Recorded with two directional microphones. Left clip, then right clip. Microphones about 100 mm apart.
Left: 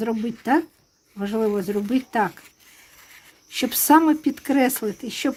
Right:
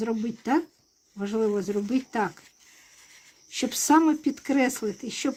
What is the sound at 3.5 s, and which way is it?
Speech, 30° left (ahead or behind).